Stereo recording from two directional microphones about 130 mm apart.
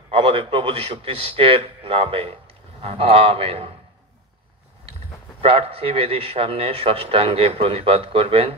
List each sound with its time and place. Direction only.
0.1 s a man's voice: 50° right (ahead or behind)
5.4 s a man's voice: 45° right (ahead or behind)